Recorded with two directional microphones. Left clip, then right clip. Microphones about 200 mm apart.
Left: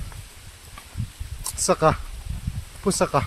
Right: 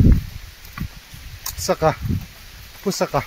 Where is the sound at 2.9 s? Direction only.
5° left (ahead or behind).